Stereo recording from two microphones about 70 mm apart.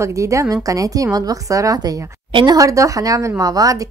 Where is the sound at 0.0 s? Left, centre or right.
Right.